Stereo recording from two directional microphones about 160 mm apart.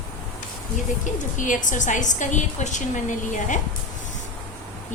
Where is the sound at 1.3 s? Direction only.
55° left (ahead or behind).